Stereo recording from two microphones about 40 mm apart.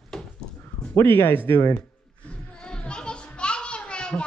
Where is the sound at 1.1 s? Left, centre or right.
Left.